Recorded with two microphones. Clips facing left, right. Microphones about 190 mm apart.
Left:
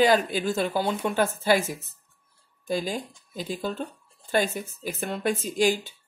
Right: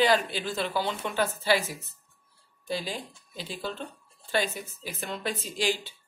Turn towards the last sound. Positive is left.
turn(degrees=45)  # may be behind; listen again after turning